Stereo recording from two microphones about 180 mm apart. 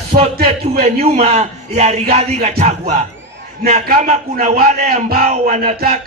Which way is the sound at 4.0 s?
40° right (ahead or behind).